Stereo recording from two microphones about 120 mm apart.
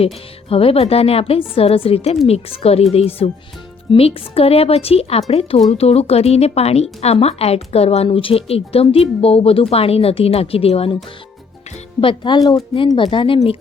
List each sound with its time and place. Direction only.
0.0 s speech: 55° left (ahead or behind)
11.9 s speech: 40° left (ahead or behind)